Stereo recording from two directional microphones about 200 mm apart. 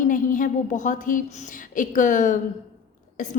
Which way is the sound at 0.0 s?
40° left (ahead or behind).